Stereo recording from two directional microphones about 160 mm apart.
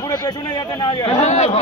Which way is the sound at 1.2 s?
45° left (ahead or behind).